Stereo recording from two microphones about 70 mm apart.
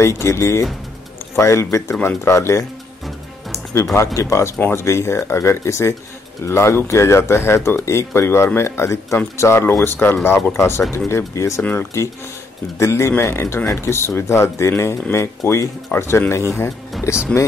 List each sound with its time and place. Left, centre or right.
0.0 s speech: left
3.8 s speech: left